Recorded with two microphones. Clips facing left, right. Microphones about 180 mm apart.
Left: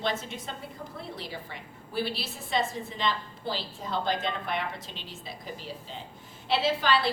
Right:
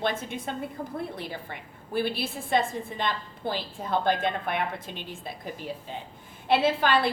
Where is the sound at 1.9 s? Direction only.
55° right (ahead or behind).